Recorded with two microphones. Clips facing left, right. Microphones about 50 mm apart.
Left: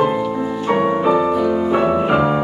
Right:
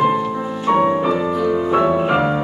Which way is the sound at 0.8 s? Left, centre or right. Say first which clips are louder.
Left 2 dB; centre.